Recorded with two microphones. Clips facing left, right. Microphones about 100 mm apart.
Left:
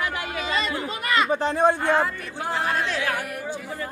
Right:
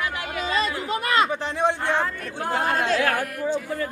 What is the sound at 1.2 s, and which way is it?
Speech, 40° left (ahead or behind).